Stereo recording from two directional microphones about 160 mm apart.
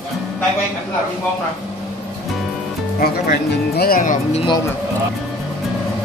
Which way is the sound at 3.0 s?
70° left (ahead or behind).